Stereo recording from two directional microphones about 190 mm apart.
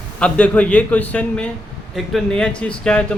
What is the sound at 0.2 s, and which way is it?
A man's voice, 5° left (ahead or behind).